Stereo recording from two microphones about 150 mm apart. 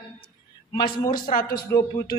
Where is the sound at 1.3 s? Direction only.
75° left (ahead or behind).